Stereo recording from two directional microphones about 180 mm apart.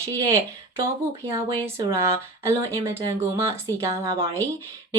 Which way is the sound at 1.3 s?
15° right (ahead or behind).